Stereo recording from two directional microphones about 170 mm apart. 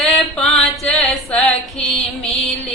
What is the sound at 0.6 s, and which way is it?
Music, centre (ahead or behind).